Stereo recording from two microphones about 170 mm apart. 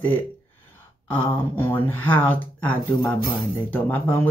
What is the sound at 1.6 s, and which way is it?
Speech, 10° left (ahead or behind).